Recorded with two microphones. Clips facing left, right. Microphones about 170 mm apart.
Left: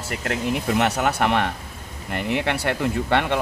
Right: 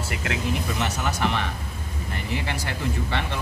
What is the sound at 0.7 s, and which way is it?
Speech, 60° left (ahead or behind).